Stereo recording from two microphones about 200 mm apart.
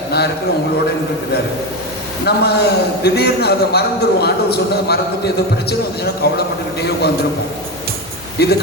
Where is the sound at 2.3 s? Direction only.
55° left (ahead or behind).